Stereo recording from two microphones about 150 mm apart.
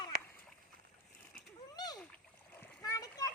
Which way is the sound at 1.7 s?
25° left (ahead or behind).